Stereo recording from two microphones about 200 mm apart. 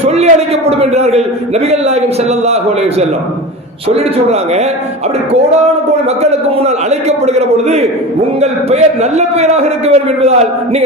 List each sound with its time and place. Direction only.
0.0 s a man's voice: 30° right (ahead or behind)
6.3 s a man's voice: 30° right (ahead or behind)